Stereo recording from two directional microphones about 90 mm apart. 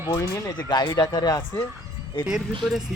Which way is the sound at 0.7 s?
50° left (ahead or behind).